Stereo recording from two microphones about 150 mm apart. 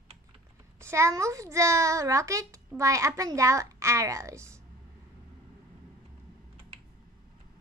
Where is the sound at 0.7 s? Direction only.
20° right (ahead or behind).